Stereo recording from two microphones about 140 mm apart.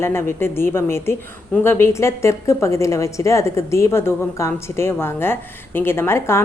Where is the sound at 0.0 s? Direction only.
15° left (ahead or behind).